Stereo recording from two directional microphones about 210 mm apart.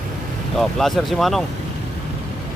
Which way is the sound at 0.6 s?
Centre (ahead or behind).